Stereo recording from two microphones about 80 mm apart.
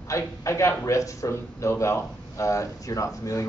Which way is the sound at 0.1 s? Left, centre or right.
Left.